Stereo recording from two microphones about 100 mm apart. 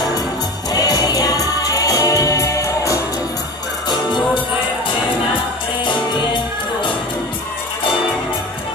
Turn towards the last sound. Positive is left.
turn(degrees=50)  # may be behind; listen again after turning